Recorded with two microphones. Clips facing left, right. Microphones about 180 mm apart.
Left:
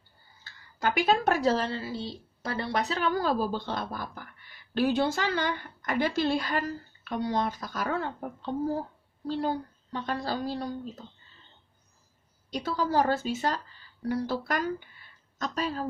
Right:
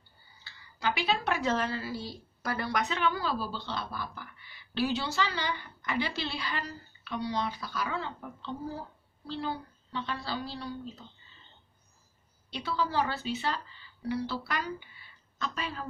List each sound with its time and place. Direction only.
0.4 s speech: 45° left (ahead or behind)
12.4 s speech: 45° left (ahead or behind)